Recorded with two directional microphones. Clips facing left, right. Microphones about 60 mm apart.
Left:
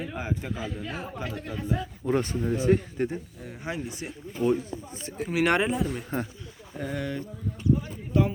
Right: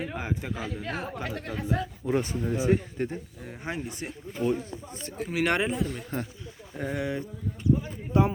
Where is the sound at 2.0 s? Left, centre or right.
Centre.